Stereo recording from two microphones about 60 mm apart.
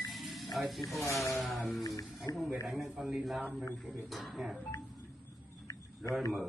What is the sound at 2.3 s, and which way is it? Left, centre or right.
Speech, left.